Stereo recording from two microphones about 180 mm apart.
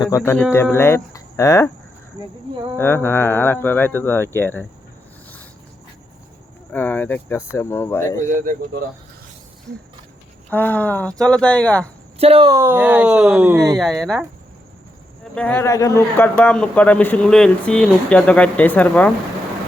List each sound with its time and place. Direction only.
0.0 s a man's voice: 15° left (ahead or behind)
2.7 s a man's voice: 15° left (ahead or behind)
6.7 s a man's voice: 10° left (ahead or behind)
9.7 s a sound: 70° right (ahead or behind)
10.5 s a man's voice: 10° left (ahead or behind)
12.2 s speech: 30° right (ahead or behind)
12.5 s speech: 15° right (ahead or behind)
13.7 s speech: centre (ahead or behind)
15.2 s a man's voice: 5° left (ahead or behind)